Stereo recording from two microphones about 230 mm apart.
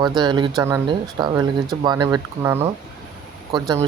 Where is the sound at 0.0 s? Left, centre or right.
Centre.